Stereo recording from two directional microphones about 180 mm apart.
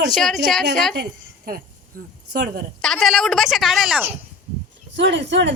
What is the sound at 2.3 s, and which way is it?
Speech, 65° right (ahead or behind).